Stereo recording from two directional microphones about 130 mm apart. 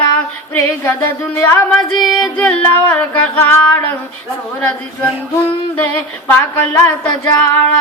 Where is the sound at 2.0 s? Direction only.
5° left (ahead or behind).